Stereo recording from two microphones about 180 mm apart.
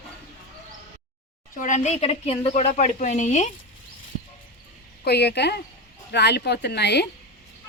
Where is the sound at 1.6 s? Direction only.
40° left (ahead or behind).